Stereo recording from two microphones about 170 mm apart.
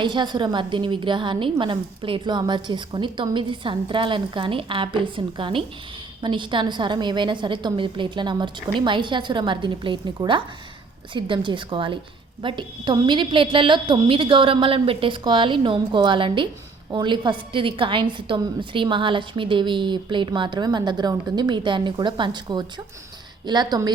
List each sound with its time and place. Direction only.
0.0 s a woman's voice: 25° right (ahead or behind)